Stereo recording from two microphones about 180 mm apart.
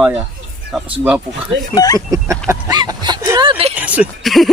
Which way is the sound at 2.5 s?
20° right (ahead or behind).